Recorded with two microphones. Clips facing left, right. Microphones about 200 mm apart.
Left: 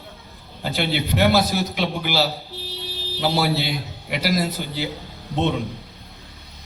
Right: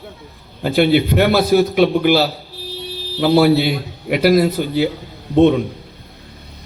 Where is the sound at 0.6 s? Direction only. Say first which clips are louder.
Right 10 dB; 55° right (ahead or behind).